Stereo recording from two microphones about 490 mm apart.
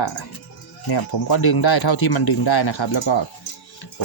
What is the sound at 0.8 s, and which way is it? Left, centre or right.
Speech, left.